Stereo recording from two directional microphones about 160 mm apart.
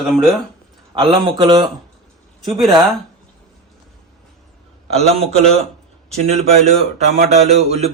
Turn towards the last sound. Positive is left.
turn(degrees=-40)  # may be behind; listen again after turning